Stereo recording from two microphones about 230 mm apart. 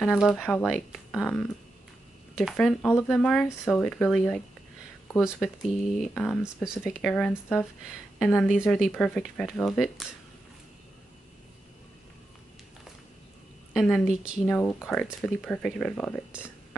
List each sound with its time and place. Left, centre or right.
0.0 s speech: centre
13.7 s speech: centre